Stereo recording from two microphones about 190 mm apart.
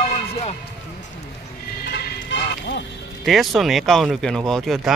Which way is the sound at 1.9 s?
65° left (ahead or behind).